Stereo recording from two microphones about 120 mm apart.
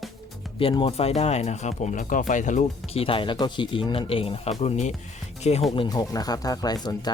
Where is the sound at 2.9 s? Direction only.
50° left (ahead or behind); by 4.9 s 70° left (ahead or behind).